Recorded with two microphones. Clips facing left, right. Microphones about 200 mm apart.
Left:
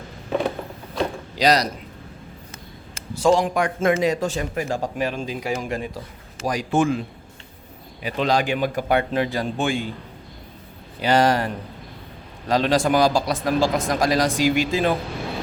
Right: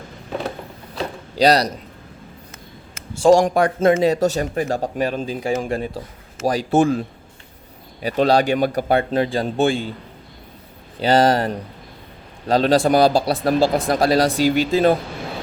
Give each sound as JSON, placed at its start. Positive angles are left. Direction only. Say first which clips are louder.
{"t": 1.4, "sound": "a man's voice", "louder": "right 4 dB", "side_deg": -35}
{"t": 3.3, "sound": "speech", "louder": "right 5 dB", "side_deg": -40}
{"t": 8.0, "sound": "speech", "louder": "right 5 dB", "side_deg": -35}
{"t": 11.0, "sound": "speech", "louder": "right 3 dB", "side_deg": -30}